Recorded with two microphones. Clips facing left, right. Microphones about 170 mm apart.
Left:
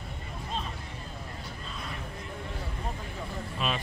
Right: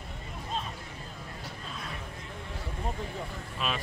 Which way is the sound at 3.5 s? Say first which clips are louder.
Left 1 dB; centre (ahead or behind).